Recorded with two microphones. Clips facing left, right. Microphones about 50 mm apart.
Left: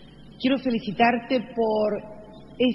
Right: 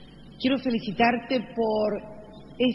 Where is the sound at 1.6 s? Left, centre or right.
Left.